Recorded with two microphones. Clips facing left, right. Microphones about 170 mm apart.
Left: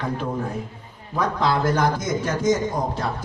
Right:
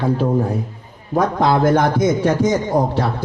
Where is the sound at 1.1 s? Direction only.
50° right (ahead or behind).